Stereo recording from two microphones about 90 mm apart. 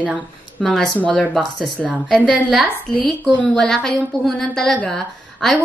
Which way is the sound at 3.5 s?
5° left (ahead or behind).